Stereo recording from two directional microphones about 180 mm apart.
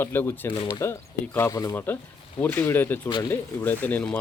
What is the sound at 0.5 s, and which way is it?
Speech, 25° left (ahead or behind).